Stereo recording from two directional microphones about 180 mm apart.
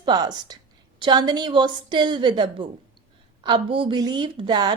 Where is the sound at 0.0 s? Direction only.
25° right (ahead or behind).